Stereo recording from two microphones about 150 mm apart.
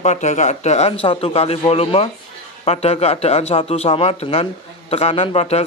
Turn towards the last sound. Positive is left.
turn(degrees=45)  # may be behind; listen again after turning